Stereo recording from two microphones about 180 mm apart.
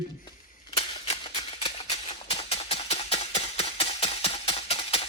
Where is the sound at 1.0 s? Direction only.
35° left (ahead or behind).